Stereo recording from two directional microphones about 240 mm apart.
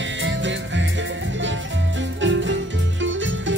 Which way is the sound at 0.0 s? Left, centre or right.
Right.